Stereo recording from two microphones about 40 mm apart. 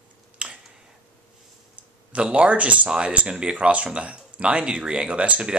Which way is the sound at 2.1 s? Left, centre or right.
Right.